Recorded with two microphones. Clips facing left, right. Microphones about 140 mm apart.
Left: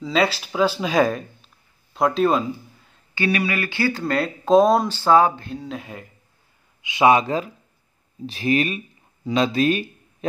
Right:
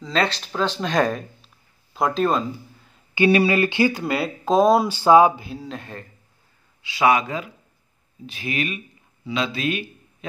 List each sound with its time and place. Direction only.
0.0 s speech: 5° left (ahead or behind)
3.2 s speech: 25° right (ahead or behind); by 6.0 s 5° left (ahead or behind)
6.8 s speech: 20° left (ahead or behind); by 9.8 s 40° left (ahead or behind)